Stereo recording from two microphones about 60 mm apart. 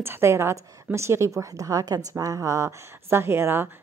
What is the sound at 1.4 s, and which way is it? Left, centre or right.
A woman's voice, right.